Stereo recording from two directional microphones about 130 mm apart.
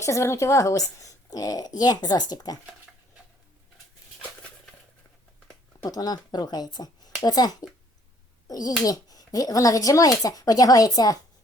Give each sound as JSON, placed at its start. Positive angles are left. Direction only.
{"t": 0.0, "sound": "a woman's voice", "side_deg": 25}
{"t": 5.8, "sound": "a child's voice", "side_deg": 30}